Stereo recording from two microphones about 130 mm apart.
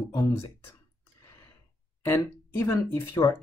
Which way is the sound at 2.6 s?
20° left (ahead or behind).